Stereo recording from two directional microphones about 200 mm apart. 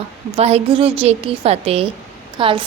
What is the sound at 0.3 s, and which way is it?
A woman's voice, 30° right (ahead or behind).